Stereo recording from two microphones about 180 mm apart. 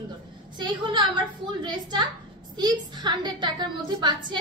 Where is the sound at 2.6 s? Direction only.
25° right (ahead or behind).